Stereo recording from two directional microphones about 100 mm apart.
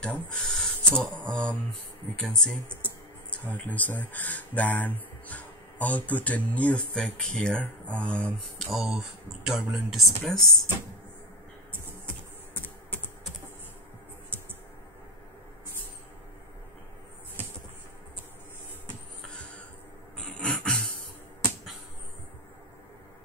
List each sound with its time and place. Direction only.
0.0 s speech: 10° left (ahead or behind)
8.6 s speech: 5° right (ahead or behind)
12.5 s typing: 20° left (ahead or behind)
19.2 s a sound: 10° left (ahead or behind)